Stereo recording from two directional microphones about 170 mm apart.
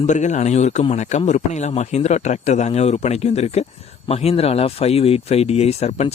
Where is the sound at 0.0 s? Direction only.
45° left (ahead or behind).